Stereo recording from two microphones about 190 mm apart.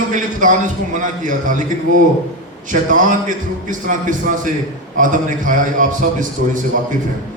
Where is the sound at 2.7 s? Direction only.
45° right (ahead or behind).